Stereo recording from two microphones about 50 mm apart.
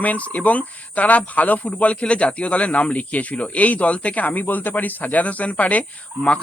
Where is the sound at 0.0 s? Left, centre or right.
Left.